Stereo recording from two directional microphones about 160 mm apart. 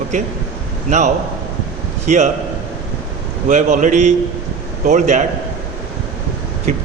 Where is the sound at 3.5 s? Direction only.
50° right (ahead or behind).